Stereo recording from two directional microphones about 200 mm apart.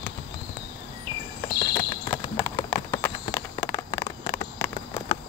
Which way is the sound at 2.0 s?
10° left (ahead or behind).